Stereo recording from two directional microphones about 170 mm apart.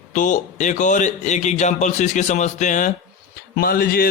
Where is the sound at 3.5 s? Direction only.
60° left (ahead or behind).